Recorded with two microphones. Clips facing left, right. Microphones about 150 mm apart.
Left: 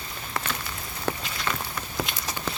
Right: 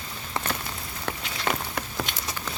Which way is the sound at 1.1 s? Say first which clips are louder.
Left 4 dB; 5° left (ahead or behind).